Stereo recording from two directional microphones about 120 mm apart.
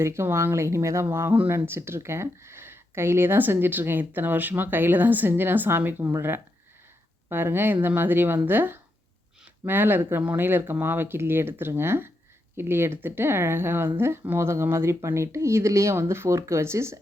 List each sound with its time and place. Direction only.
0.0 s speech: 20° right (ahead or behind)